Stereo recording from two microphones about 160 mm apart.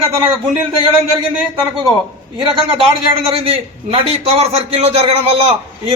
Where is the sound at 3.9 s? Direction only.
40° right (ahead or behind).